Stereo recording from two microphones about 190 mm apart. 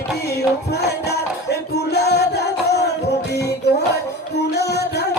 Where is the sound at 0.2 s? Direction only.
60° left (ahead or behind).